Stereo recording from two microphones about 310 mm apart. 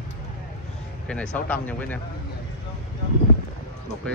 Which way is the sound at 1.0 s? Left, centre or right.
Centre.